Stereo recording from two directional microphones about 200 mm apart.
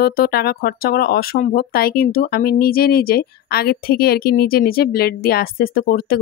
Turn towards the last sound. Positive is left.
turn(degrees=50)  # may be behind; listen again after turning